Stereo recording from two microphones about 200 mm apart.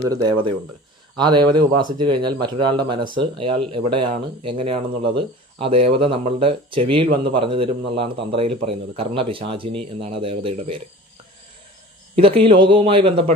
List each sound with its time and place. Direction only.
0.1 s speech: 20° right (ahead or behind)
12.1 s speech: 30° right (ahead or behind)